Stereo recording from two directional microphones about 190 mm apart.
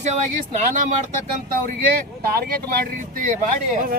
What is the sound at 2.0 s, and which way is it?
Speech, 50° right (ahead or behind).